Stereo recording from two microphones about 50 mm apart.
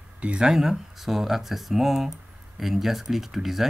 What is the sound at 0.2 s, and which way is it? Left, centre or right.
Speech, right.